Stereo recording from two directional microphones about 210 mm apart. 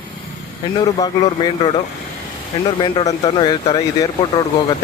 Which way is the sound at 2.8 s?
20° left (ahead or behind).